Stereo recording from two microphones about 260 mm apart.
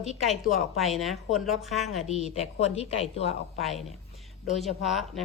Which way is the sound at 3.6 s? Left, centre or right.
Centre.